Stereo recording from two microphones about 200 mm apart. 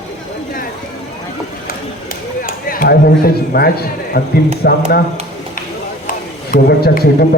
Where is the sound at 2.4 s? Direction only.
45° left (ahead or behind).